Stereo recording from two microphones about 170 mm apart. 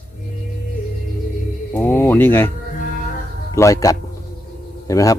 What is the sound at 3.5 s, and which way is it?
Speech, 20° left (ahead or behind).